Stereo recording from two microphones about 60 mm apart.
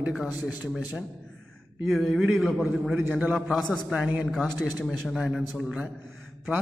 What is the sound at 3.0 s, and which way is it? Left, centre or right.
Speech, right.